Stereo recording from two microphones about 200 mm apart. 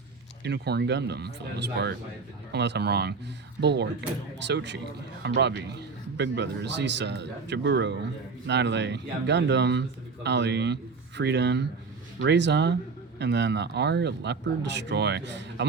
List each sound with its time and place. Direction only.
0.4 s speech: 55° right (ahead or behind)